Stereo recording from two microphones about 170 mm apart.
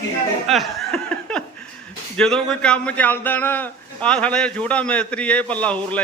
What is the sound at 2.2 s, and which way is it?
Speech, 5° left (ahead or behind).